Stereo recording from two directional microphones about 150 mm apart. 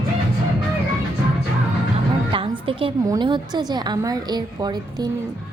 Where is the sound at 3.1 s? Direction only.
30° right (ahead or behind).